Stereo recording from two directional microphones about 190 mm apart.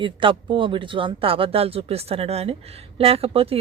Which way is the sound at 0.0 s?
25° right (ahead or behind).